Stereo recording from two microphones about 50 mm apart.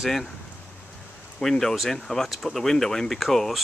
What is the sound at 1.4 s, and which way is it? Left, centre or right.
Speech, centre.